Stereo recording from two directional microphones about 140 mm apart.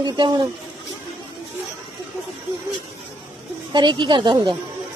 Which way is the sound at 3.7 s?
35° right (ahead or behind).